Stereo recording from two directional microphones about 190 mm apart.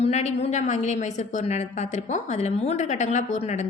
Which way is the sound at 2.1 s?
35° left (ahead or behind).